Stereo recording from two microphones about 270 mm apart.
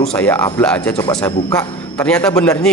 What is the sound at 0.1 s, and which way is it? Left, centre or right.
A man's voice, centre.